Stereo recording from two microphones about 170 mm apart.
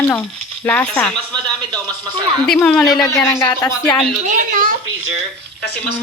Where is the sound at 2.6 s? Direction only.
5° left (ahead or behind).